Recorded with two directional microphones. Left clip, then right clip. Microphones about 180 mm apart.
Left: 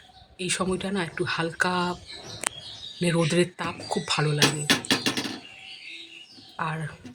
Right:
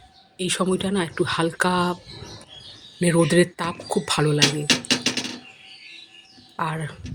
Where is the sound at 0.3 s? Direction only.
15° right (ahead or behind).